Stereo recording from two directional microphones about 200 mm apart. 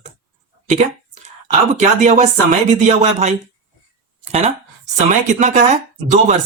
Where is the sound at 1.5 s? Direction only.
35° right (ahead or behind).